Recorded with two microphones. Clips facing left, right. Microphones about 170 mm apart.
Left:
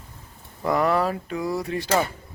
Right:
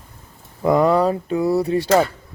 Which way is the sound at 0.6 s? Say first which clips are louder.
Right 6 dB; 20° right (ahead or behind).